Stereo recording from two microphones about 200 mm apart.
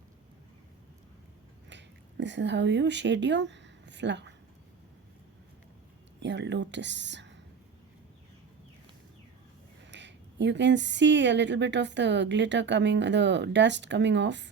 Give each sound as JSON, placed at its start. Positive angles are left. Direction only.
{"t": 1.7, "sound": "speech", "side_deg": -60}
{"t": 6.2, "sound": "speech", "side_deg": -60}
{"t": 9.9, "sound": "speech", "side_deg": -60}